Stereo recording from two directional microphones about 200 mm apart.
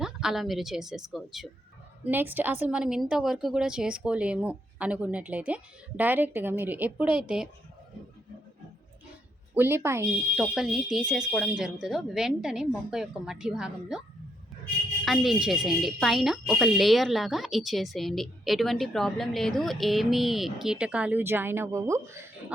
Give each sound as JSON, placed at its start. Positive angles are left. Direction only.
{"t": 0.0, "sound": "a woman's voice", "side_deg": 0}
{"t": 9.6, "sound": "a woman's voice", "side_deg": -10}
{"t": 10.4, "sound": "a woman's voice", "side_deg": -5}
{"t": 15.0, "sound": "a woman's voice", "side_deg": 0}